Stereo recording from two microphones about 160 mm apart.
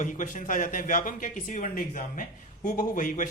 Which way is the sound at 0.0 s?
55° left (ahead or behind).